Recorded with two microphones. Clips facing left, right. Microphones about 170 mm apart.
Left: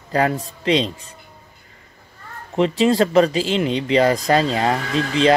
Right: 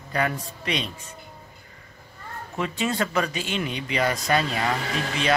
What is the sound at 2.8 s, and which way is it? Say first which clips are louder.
Speech: left 10 dB; 30° left (ahead or behind).